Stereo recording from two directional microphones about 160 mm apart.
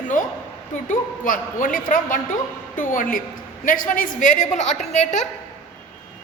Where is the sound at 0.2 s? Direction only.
55° left (ahead or behind).